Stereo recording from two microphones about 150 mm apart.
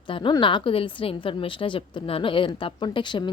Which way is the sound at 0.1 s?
30° left (ahead or behind).